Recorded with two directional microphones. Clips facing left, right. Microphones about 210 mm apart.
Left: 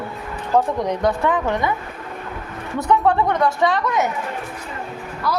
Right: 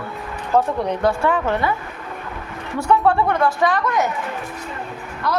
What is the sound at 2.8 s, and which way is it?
A woman's voice, 20° left (ahead or behind).